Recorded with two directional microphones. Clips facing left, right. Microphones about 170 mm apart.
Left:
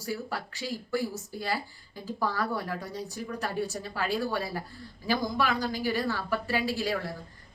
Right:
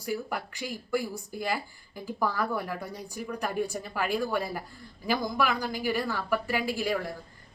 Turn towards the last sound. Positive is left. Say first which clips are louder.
# even
turn(degrees=-15)  # may be behind; listen again after turning